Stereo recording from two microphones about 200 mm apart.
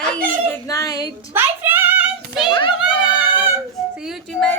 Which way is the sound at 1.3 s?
10° right (ahead or behind).